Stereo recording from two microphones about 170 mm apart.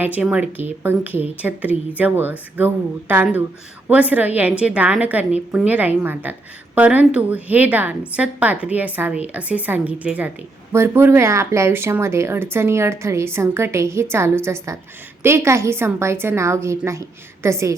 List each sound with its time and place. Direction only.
0.0 s a woman's voice: 10° right (ahead or behind)